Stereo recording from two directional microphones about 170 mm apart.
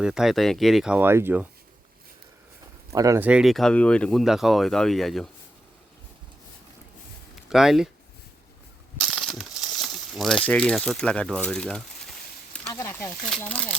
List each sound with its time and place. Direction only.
0.0 s speech: centre (ahead or behind)
2.9 s speech: 20° right (ahead or behind)
3.2 s speech: 5° right (ahead or behind)
7.5 s speech: centre (ahead or behind)
9.0 s speech: centre (ahead or behind)
12.7 s speech: 15° left (ahead or behind)